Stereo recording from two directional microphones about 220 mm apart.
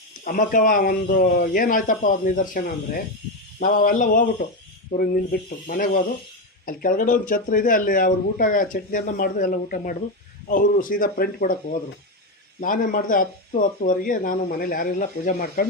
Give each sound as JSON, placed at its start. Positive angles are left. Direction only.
{"t": 0.3, "sound": "speech", "side_deg": 35}
{"t": 5.6, "sound": "speech", "side_deg": 40}
{"t": 12.5, "sound": "speech", "side_deg": 35}